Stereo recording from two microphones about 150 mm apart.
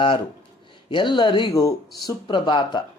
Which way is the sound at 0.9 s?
30° left (ahead or behind).